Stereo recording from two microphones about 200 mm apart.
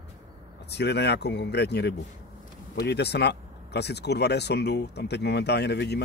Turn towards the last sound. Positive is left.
turn(degrees=55)  # may be behind; listen again after turning